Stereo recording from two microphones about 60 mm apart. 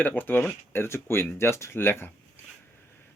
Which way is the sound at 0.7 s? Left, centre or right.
Left.